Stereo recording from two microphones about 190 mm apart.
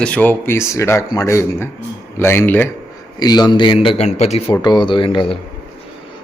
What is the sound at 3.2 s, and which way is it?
A man's voice, 20° left (ahead or behind).